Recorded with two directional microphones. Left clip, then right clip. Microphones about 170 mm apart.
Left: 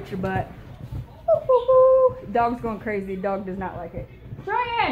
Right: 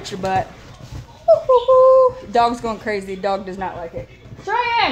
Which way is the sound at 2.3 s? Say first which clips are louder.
Right 6 dB; 25° right (ahead or behind).